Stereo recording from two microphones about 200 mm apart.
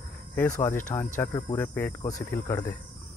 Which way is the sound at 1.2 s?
20° left (ahead or behind).